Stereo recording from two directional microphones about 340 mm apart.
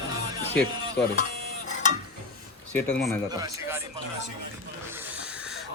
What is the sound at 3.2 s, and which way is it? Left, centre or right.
Speech, centre.